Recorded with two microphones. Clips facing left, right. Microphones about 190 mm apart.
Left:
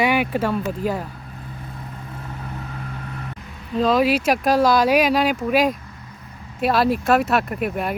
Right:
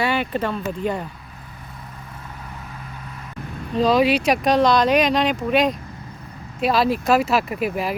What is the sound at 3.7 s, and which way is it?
Speech, centre (ahead or behind).